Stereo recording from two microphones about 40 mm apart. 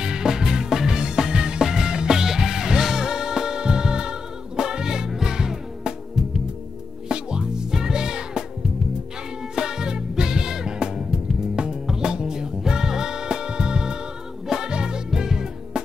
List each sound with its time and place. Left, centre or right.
0.0 s music: centre
9.6 s music: centre